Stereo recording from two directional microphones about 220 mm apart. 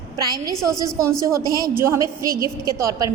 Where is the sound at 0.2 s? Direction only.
20° right (ahead or behind).